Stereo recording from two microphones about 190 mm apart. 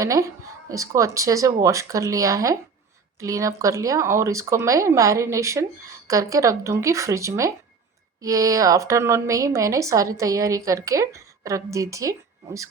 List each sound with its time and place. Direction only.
0.0 s a woman's voice: 15° right (ahead or behind)